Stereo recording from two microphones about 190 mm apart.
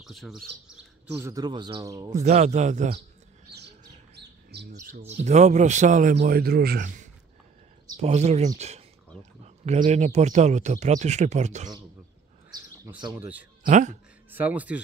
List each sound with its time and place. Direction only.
0.0 s speech: centre (ahead or behind)
1.1 s speech: 15° right (ahead or behind)
2.2 s speech: 35° right (ahead or behind)
3.4 s bird: 60° right (ahead or behind)
5.0 s speech: 35° right (ahead or behind)
6.1 s speech: 50° right (ahead or behind); by 8.8 s 35° right (ahead or behind)
9.8 s speech: 35° right (ahead or behind)
13.2 s speech: 10° right (ahead or behind)
13.7 s speech: 40° right (ahead or behind)
14.3 s speech: 10° right (ahead or behind)